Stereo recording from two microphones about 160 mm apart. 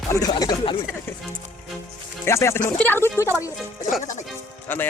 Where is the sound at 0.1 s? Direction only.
20° left (ahead or behind).